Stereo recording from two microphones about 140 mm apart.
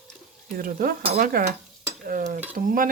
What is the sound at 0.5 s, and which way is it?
Dishes, 85° right.